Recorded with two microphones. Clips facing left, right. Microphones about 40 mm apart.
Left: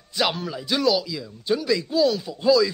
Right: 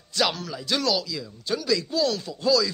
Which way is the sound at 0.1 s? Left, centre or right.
Centre.